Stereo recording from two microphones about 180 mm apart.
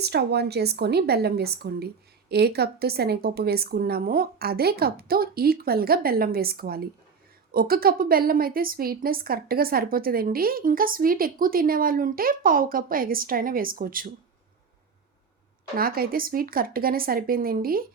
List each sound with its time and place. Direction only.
0.0 s a woman's voice: 65° right (ahead or behind)
15.7 s a woman's voice: 55° right (ahead or behind)